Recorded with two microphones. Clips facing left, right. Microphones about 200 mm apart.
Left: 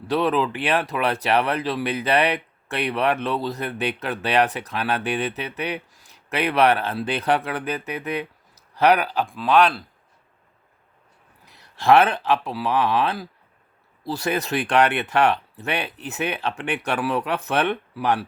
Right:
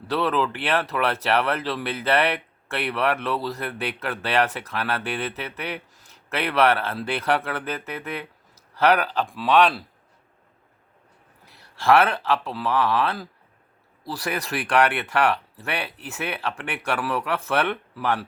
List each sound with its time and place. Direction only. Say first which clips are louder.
0.1 s speech: left 2 dB; 15° left (ahead or behind)
9.3 s speech: left 1 dB; centre (ahead or behind)
11.4 s speech: left 2 dB; 20° left (ahead or behind)